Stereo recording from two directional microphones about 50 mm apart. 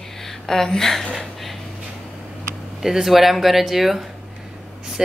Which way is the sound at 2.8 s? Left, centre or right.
Centre.